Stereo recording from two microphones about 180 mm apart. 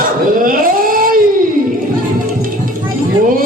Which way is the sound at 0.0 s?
50° right (ahead or behind).